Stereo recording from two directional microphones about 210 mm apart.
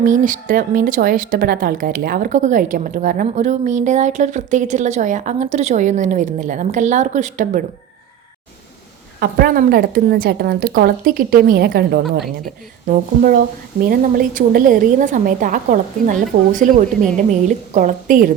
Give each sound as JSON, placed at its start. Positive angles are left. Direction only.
{"t": 0.0, "sound": "speech", "side_deg": -40}
{"t": 9.2, "sound": "a woman's voice", "side_deg": -45}